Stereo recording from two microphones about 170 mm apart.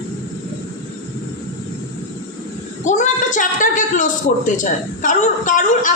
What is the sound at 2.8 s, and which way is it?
A woman's voice, 45° left (ahead or behind).